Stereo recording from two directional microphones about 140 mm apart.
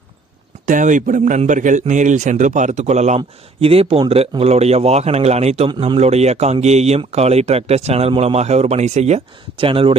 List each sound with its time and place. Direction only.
0.6 s speech: 65° right (ahead or behind)
3.2 s speech: 45° right (ahead or behind)